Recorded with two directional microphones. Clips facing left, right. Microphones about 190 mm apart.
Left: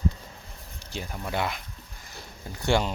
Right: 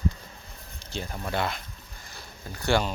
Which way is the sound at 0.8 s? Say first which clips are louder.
Right 1 dB; 10° left (ahead or behind).